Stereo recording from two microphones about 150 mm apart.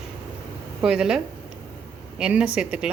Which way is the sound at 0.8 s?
5° right (ahead or behind).